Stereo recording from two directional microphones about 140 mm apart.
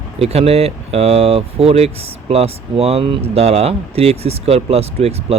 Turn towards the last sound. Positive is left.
turn(degrees=-45)  # may be behind; listen again after turning